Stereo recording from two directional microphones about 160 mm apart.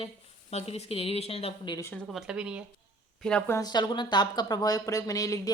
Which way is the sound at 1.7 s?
20° left (ahead or behind).